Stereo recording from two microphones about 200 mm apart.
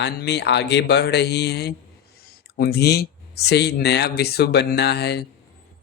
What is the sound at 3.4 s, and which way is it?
Speech, 55° left (ahead or behind).